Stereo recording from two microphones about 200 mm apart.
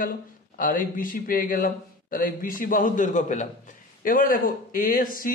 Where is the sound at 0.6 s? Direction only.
45° left (ahead or behind).